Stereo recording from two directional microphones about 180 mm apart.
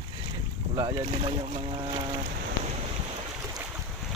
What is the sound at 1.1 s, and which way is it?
Speech, 25° right (ahead or behind).